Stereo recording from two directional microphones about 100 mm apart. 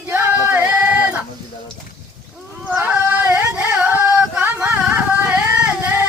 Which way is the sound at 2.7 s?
15° right (ahead or behind).